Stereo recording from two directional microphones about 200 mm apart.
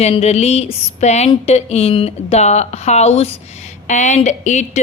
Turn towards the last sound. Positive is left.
turn(degrees=35)  # may be behind; listen again after turning